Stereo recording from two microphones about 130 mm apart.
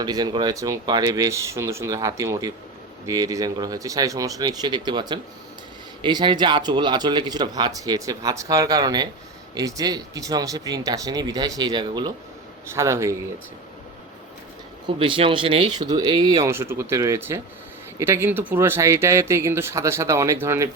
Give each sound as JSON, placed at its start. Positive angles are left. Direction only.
{"t": 0.0, "sound": "speech", "side_deg": -30}
{"t": 12.7, "sound": "speech", "side_deg": -25}
{"t": 14.8, "sound": "speech", "side_deg": -40}
{"t": 15.8, "sound": "speech", "side_deg": -30}
{"t": 16.5, "sound": "speech", "side_deg": -20}